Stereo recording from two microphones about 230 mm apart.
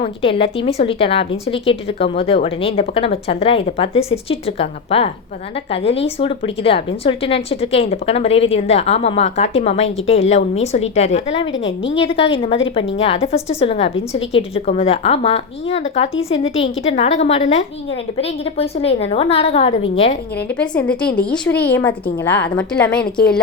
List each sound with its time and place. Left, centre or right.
0.0 s a woman's voice: left
11.5 s a woman's voice: left
11.9 s a woman's voice: left
20.5 s a woman's voice: centre